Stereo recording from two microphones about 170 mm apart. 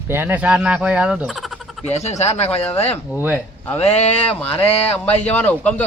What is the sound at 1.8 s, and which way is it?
Speech, 40° left (ahead or behind).